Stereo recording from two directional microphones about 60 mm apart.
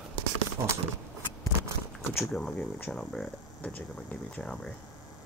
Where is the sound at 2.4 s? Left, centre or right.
Centre.